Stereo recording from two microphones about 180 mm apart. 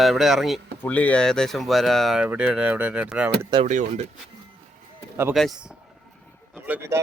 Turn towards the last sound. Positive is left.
turn(degrees=-10)  # may be behind; listen again after turning